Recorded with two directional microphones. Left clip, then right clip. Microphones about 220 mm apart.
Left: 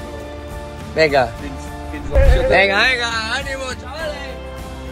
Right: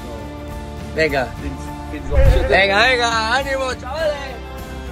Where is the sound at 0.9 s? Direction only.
20° left (ahead or behind).